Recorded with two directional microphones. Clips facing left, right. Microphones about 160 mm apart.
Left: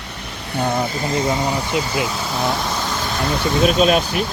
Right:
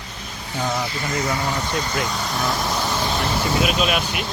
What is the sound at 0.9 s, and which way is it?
Speech, 35° left (ahead or behind).